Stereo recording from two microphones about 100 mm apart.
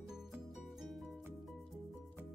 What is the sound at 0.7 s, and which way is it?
Music, centre (ahead or behind).